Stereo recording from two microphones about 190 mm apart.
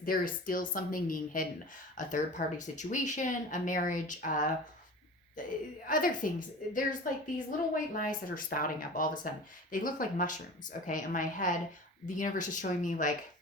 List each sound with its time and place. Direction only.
0.0 s a woman's voice: 50° left (ahead or behind)
5.9 s a woman's voice: 45° left (ahead or behind)